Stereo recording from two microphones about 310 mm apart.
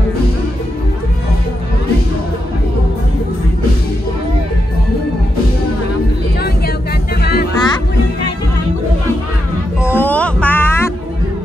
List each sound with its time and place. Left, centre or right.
7.2 s music: left
7.5 s music: centre
9.8 s music: centre